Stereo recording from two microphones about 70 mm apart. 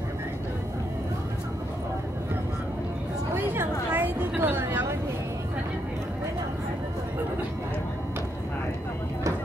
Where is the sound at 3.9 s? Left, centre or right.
Right.